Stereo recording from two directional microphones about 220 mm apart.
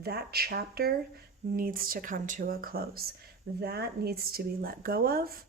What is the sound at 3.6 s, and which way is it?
Speech, 45° right (ahead or behind).